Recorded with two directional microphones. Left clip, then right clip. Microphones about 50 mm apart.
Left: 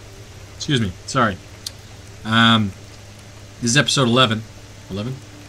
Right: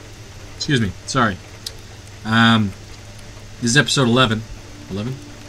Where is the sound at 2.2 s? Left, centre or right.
Centre.